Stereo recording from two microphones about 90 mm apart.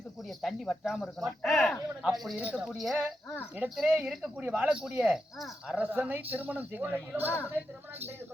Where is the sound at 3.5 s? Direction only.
15° right (ahead or behind).